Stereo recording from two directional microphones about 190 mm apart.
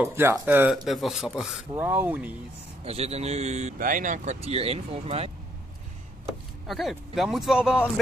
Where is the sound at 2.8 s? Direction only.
35° right (ahead or behind).